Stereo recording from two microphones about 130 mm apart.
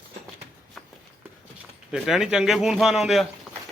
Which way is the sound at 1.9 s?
5° right (ahead or behind).